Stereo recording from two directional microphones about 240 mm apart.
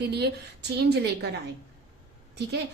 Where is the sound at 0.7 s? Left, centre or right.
Right.